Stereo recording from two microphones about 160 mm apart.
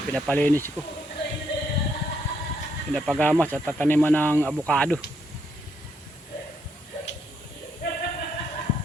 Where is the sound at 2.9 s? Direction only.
5° left (ahead or behind).